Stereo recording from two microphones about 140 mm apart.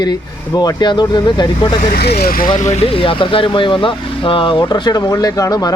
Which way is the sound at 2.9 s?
40° left (ahead or behind).